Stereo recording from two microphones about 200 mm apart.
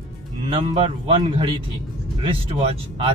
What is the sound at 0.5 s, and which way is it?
Speech, 30° right (ahead or behind).